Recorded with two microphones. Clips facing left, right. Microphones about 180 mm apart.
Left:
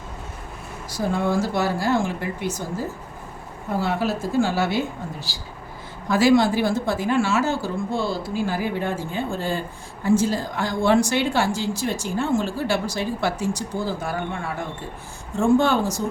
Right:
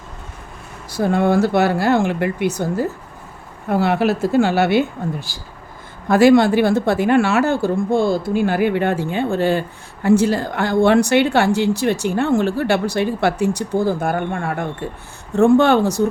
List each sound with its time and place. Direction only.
0.9 s a woman's voice: 60° right (ahead or behind)